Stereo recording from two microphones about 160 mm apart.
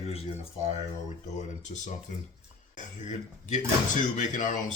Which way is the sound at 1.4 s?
50° left (ahead or behind).